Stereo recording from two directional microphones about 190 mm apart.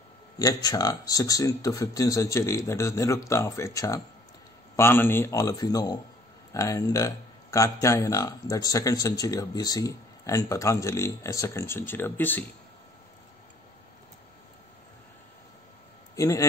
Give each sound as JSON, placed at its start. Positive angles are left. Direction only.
{"t": 0.4, "sound": "speech", "side_deg": 20}
{"t": 16.2, "sound": "speech", "side_deg": 15}